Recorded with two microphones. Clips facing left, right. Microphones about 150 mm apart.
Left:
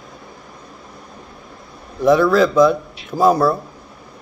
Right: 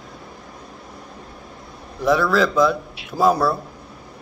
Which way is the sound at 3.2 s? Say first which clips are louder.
Left 3 dB; 15° left (ahead or behind).